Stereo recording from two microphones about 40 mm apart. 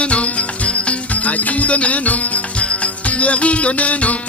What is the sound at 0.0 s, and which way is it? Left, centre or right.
Music, left.